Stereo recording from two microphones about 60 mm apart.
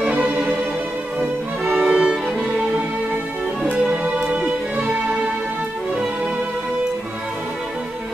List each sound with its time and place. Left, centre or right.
0.0 s music: centre
1.6 s music: centre
4.0 s music: centre